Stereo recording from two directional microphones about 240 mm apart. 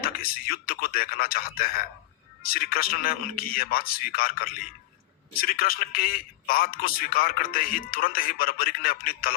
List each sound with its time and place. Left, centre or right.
0.0 s a man's voice: left